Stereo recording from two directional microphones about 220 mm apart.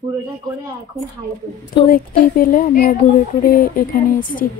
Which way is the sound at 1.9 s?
40° left (ahead or behind).